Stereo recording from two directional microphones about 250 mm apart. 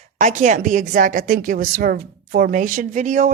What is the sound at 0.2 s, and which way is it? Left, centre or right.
A woman's voice, right.